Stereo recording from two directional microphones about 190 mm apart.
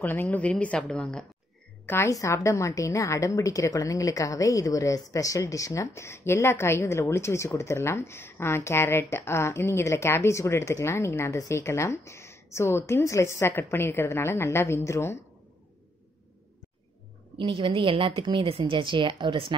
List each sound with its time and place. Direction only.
0.0 s a woman's voice: 10° left (ahead or behind)
1.9 s a woman's voice: 15° left (ahead or behind)
17.4 s speech: 25° right (ahead or behind)